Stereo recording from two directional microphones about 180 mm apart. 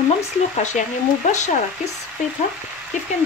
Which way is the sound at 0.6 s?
45° left (ahead or behind).